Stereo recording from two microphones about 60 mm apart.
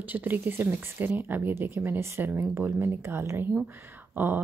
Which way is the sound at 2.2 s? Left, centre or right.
Right.